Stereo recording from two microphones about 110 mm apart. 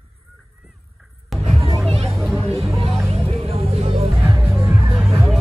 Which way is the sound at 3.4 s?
60° right (ahead or behind).